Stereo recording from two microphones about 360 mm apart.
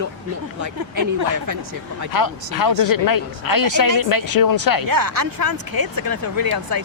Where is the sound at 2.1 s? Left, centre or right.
Left.